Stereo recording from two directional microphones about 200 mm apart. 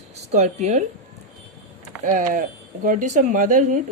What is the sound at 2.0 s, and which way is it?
Speech, 40° right (ahead or behind).